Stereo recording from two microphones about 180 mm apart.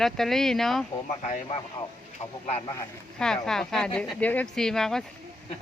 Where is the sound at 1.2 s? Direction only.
35° left (ahead or behind).